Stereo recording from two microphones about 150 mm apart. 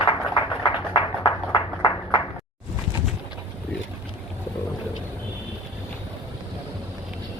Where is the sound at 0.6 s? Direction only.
30° left (ahead or behind).